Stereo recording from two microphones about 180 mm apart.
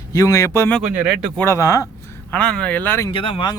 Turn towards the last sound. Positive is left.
turn(degrees=25)  # may be behind; listen again after turning